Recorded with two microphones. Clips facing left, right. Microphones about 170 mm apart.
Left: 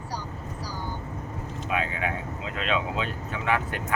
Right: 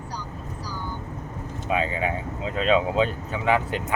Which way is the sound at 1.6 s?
30° right (ahead or behind).